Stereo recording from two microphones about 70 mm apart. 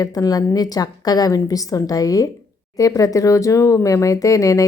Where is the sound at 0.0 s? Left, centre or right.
Left.